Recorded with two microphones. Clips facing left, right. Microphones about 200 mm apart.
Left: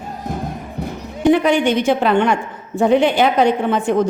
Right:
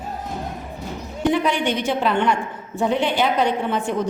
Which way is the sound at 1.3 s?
55° left (ahead or behind).